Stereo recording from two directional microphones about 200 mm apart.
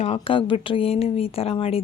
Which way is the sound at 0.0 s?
30° left (ahead or behind).